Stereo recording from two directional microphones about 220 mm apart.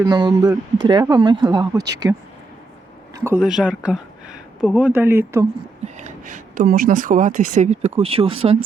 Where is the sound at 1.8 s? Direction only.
50° right (ahead or behind).